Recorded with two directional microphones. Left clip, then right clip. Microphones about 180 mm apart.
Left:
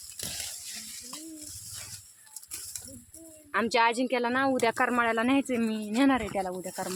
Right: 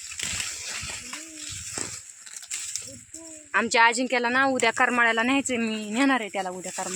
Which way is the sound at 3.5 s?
5° right (ahead or behind).